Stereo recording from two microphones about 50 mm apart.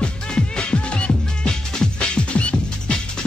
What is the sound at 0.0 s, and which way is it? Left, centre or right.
Music, centre.